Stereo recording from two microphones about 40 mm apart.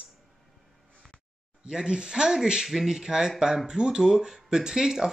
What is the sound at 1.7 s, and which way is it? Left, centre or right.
Speech, centre.